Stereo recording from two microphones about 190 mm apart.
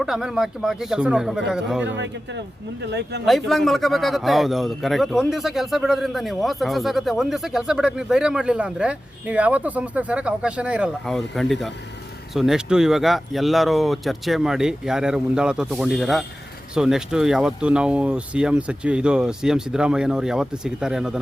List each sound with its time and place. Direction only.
0.0 s a man's voice: centre (ahead or behind)
2.8 s speech: 60° right (ahead or behind)
3.2 s a man's voice: centre (ahead or behind)